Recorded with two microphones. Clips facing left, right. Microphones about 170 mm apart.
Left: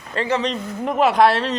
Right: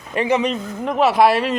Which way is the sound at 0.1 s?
15° right (ahead or behind).